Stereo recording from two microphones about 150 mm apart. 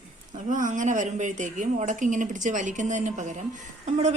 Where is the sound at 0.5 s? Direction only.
60° right (ahead or behind).